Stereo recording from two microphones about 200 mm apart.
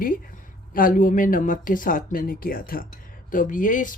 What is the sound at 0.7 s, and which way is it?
Speech, 45° left (ahead or behind).